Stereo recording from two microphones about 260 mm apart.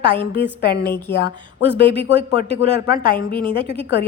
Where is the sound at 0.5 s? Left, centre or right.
Left.